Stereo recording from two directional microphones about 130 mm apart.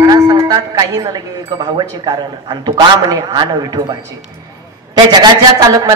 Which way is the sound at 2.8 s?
30° right (ahead or behind).